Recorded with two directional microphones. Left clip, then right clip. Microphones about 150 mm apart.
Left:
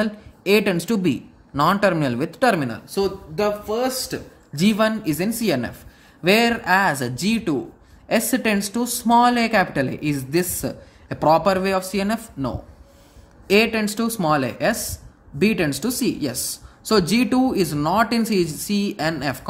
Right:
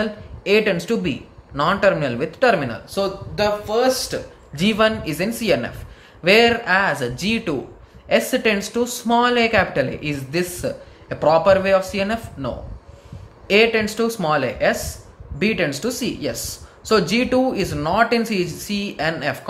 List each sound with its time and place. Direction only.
0.0 s speech: 45° left (ahead or behind)